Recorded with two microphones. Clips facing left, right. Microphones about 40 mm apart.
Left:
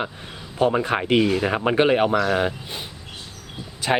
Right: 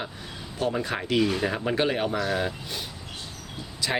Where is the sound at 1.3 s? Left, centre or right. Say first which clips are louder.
Left 5 dB; centre.